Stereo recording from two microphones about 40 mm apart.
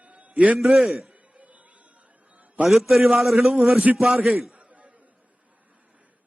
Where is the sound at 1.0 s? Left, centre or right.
Right.